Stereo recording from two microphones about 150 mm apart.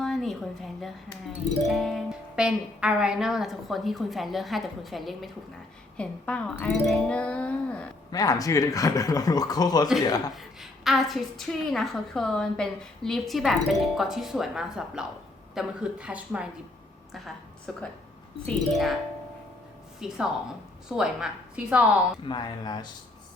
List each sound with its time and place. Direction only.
0.0 s speech: centre (ahead or behind)
8.1 s speech: 25° left (ahead or behind)
10.3 s a woman's voice: centre (ahead or behind)
20.0 s a woman's voice: 5° right (ahead or behind)
22.2 s speech: 30° left (ahead or behind)